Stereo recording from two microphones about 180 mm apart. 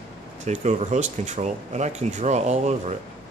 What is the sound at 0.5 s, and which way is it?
Speech, 40° right (ahead or behind).